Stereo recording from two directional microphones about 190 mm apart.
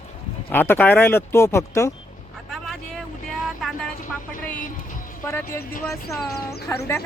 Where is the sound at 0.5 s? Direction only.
10° left (ahead or behind).